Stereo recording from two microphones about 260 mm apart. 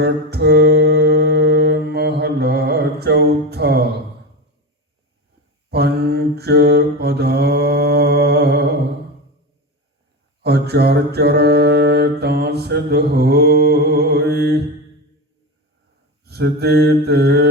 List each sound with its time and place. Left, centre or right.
0.0 s mantra: right
5.7 s mantra: right
10.4 s mantra: right
16.2 s mantra: right